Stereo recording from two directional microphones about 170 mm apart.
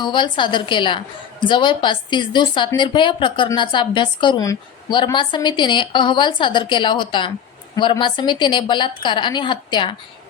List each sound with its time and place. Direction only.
0.0 s a woman's voice: 30° left (ahead or behind)